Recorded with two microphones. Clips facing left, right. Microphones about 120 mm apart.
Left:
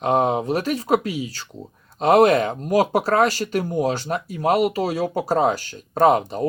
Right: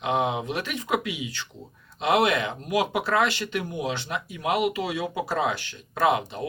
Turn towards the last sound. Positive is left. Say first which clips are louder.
# left 6 dB
turn(degrees=40)  # may be behind; listen again after turning